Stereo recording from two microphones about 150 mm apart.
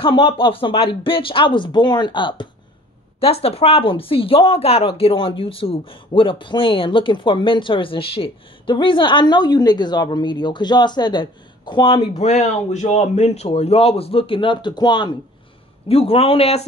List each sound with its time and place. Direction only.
0.0 s speech: 35° left (ahead or behind)
15.9 s speech: 40° left (ahead or behind)